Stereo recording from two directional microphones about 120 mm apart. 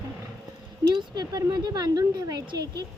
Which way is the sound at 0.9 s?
35° right (ahead or behind).